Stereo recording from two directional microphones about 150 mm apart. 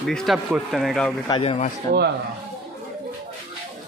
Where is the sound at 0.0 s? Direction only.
5° left (ahead or behind).